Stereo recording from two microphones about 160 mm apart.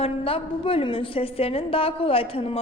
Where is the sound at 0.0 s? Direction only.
35° left (ahead or behind).